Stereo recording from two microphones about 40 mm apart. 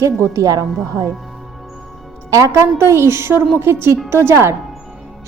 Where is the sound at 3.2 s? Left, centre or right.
Right.